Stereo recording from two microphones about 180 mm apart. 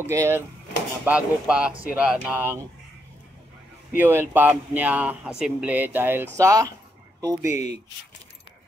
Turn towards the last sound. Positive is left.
turn(degrees=-20)  # may be behind; listen again after turning